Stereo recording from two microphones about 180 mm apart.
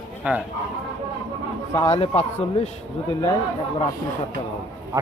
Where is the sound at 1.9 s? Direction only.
35° left (ahead or behind).